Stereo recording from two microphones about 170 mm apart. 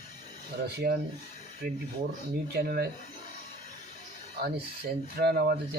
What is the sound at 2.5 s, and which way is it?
Speech, 70° right (ahead or behind).